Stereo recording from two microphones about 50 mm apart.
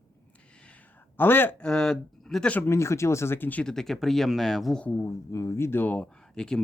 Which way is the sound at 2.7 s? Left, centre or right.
Left.